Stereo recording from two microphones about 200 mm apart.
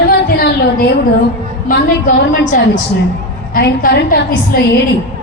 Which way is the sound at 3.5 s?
55° left (ahead or behind).